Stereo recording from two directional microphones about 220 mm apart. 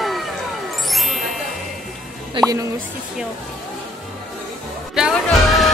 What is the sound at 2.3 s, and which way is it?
Music, 15° right (ahead or behind).